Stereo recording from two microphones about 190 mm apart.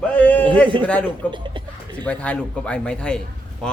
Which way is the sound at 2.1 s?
5° left (ahead or behind).